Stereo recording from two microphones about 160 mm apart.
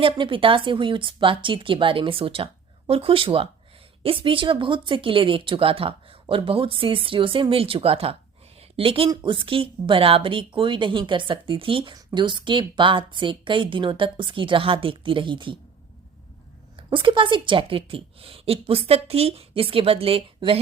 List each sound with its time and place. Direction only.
0.0 s a woman's voice: 35° right (ahead or behind)
16.7 s a woman's voice: 35° right (ahead or behind)